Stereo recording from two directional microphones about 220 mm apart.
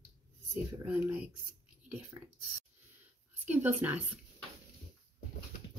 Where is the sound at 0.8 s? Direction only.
5° right (ahead or behind).